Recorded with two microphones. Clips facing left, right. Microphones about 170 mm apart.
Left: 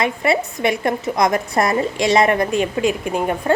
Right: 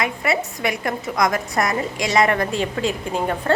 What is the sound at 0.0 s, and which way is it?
A woman's voice, 25° left (ahead or behind).